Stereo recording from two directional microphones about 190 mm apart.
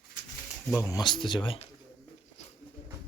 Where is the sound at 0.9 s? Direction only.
25° left (ahead or behind).